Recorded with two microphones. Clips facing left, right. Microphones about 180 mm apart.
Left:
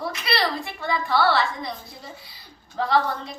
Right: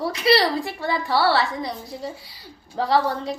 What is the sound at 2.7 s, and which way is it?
Speech, 35° right (ahead or behind).